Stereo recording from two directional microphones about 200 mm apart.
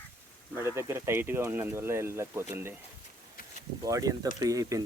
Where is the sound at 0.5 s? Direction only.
15° right (ahead or behind).